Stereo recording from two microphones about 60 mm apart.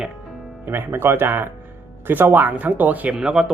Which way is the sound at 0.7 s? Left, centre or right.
Right.